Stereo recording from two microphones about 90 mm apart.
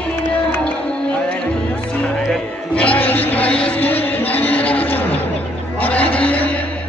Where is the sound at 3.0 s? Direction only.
20° left (ahead or behind).